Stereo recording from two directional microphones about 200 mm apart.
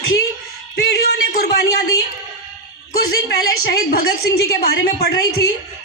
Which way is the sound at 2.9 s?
50° left (ahead or behind).